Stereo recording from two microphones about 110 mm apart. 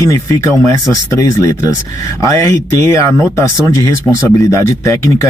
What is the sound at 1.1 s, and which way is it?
A man's voice, 30° left (ahead or behind).